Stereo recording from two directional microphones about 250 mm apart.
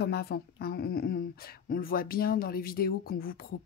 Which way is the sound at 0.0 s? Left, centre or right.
Left.